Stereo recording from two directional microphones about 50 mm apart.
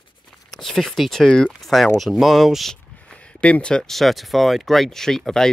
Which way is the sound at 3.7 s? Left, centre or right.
Centre.